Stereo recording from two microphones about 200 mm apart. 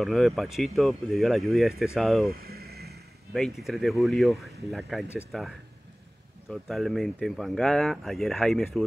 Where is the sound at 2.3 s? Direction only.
50° right (ahead or behind).